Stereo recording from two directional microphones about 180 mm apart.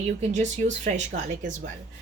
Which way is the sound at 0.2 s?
40° right (ahead or behind).